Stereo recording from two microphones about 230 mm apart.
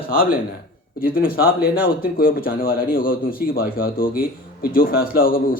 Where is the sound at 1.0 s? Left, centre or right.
Left.